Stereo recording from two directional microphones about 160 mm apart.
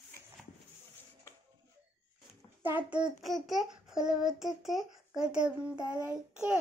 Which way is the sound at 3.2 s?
Centre (ahead or behind).